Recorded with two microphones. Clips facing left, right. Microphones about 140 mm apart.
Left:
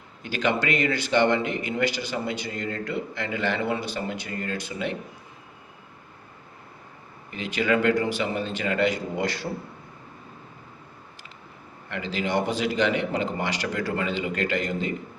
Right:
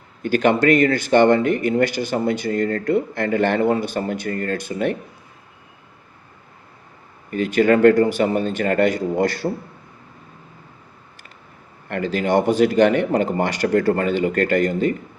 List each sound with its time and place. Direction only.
0.2 s speech: 50° right (ahead or behind)
7.3 s speech: 50° right (ahead or behind)
11.9 s speech: 50° right (ahead or behind)